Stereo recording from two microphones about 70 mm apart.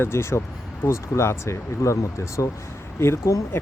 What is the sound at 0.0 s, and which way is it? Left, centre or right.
Speech, left.